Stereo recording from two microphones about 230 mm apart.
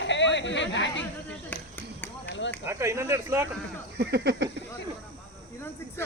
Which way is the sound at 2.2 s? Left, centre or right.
Left.